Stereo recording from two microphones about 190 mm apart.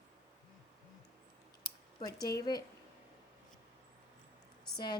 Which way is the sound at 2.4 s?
20° left (ahead or behind).